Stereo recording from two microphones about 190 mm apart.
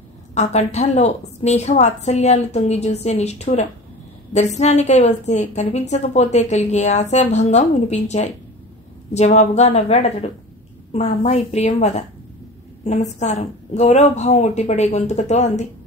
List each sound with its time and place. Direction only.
0.3 s a woman's voice: 35° left (ahead or behind)